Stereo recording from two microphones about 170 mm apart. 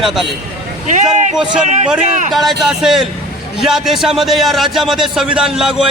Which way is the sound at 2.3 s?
Centre (ahead or behind).